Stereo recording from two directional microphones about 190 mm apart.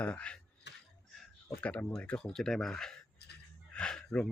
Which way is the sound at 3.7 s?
5° left (ahead or behind).